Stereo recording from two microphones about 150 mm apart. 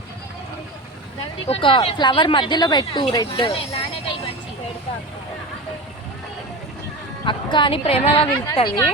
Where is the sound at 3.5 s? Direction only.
40° left (ahead or behind).